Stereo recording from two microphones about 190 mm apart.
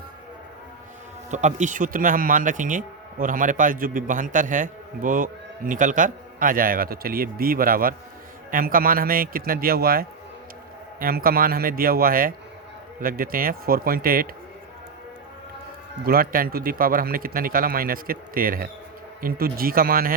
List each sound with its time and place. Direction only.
1.3 s speech: 40° right (ahead or behind)
16.0 s speech: 50° right (ahead or behind)